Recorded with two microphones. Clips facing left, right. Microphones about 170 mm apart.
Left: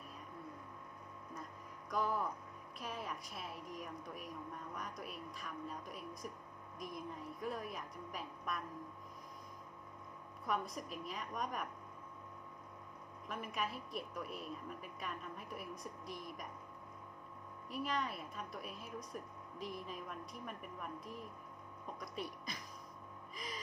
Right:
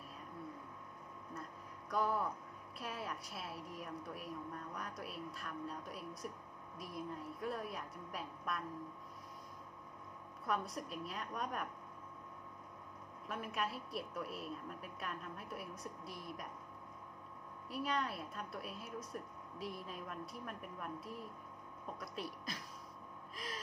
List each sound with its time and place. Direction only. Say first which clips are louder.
1.9 s speech: right 1 dB; centre (ahead or behind)
10.4 s speech: even; centre (ahead or behind)
13.3 s speech: right 1 dB; centre (ahead or behind)
17.6 s speech: right 1 dB; centre (ahead or behind)
23.3 s gasp: right 1 dB; centre (ahead or behind)